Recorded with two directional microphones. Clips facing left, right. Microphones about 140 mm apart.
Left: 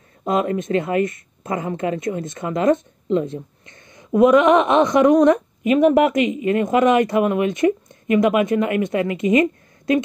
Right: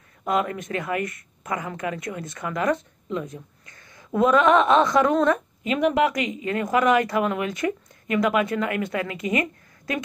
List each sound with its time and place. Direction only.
0.2 s speech: 25° left (ahead or behind)